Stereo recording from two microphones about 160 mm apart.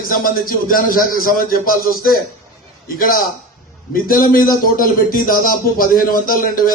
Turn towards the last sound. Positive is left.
turn(degrees=65)  # may be behind; listen again after turning